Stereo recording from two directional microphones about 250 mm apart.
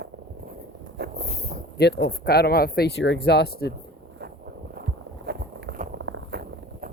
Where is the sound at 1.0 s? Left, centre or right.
Right.